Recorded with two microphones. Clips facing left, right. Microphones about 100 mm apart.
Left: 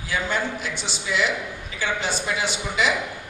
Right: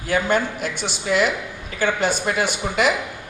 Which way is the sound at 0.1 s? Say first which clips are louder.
Right 5 dB; 50° right (ahead or behind).